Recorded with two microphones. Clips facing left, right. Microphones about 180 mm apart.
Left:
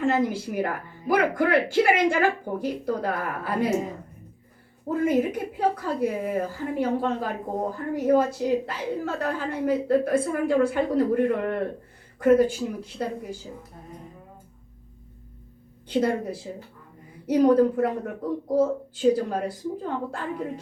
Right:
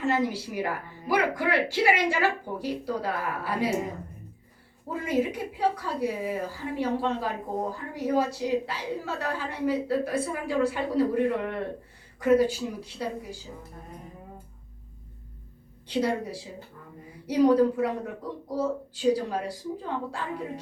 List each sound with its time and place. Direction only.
0.0 s a woman's voice: 50° left (ahead or behind)
4.9 s a woman's voice: 50° left (ahead or behind)
15.9 s a woman's voice: 50° left (ahead or behind)